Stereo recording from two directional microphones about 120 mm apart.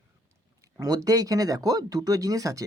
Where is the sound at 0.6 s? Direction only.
30° right (ahead or behind).